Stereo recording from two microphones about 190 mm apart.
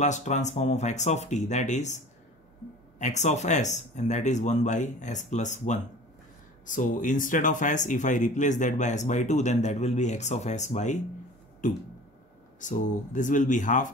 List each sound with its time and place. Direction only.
0.0 s speech: 40° left (ahead or behind)
3.0 s speech: 40° left (ahead or behind)
12.5 s speech: 40° left (ahead or behind)